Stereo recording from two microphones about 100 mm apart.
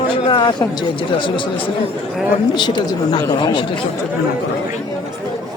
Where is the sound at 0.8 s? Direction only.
55° left (ahead or behind).